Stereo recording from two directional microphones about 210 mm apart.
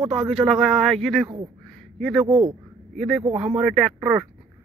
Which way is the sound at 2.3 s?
25° right (ahead or behind).